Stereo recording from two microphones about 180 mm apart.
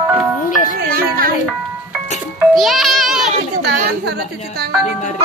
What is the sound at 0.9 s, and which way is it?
Music, 55° right (ahead or behind).